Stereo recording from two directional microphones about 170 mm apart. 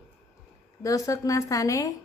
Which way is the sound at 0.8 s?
20° left (ahead or behind).